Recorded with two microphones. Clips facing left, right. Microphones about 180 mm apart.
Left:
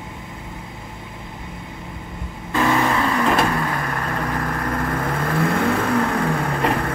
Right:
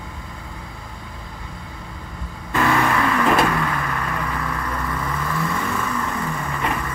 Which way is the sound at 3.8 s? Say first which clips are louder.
Left 1 dB; 45° left (ahead or behind).